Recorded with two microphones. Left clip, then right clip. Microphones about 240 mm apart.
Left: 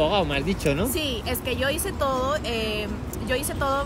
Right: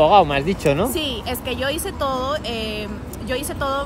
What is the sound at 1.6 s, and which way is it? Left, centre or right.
Speech, centre.